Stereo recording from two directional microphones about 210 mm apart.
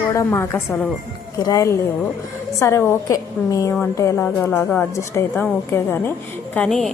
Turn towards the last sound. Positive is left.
turn(degrees=0)  # may be behind; listen again after turning